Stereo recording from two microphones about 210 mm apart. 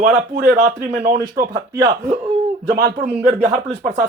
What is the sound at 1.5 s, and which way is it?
Speech, 20° right (ahead or behind).